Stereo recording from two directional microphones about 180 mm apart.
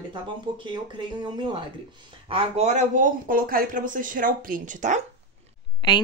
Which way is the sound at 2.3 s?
35° right (ahead or behind).